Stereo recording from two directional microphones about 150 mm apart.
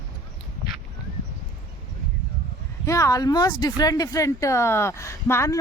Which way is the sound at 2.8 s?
20° left (ahead or behind).